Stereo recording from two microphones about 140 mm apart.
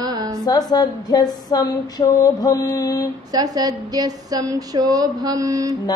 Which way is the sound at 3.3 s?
25° right (ahead or behind).